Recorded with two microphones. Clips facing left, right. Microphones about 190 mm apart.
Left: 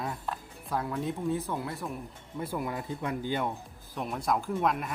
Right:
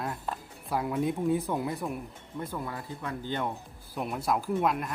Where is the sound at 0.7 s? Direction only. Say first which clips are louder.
Right 3 dB; 15° right (ahead or behind).